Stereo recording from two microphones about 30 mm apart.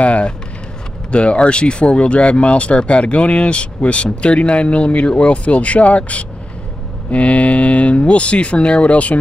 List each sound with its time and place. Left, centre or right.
0.0 s a sound: left
1.1 s speech: left
8.9 s speech: left